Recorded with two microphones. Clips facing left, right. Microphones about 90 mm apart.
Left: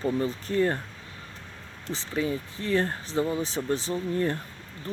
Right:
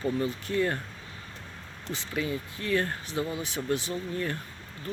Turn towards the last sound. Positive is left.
turn(degrees=35)  # may be behind; listen again after turning